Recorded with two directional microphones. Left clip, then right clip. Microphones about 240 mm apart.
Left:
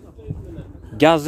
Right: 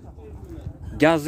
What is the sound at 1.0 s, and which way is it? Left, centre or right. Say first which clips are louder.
Speech: left 4 dB; centre.